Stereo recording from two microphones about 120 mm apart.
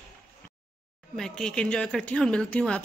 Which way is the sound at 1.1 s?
5° left (ahead or behind).